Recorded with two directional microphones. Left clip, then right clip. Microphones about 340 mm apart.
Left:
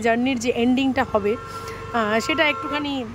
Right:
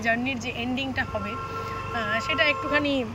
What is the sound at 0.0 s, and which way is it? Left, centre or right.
Speech, centre.